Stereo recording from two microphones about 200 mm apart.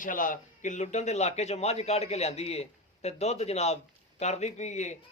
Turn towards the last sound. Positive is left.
turn(degrees=35)  # may be behind; listen again after turning